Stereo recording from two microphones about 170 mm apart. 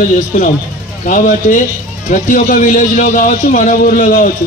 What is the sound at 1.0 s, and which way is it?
A man's voice, 50° left (ahead or behind).